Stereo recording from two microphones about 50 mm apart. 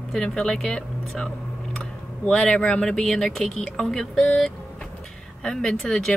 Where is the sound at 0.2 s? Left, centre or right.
Centre.